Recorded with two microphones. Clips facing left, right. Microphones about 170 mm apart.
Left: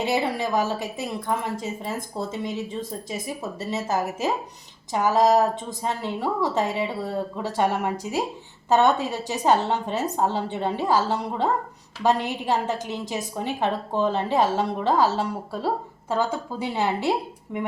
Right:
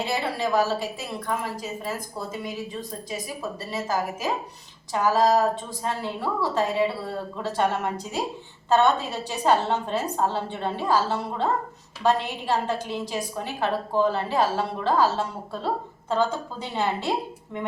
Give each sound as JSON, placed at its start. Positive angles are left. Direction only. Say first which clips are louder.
{"t": 0.0, "sound": "a woman's voice", "louder": "left 2 dB", "side_deg": 20}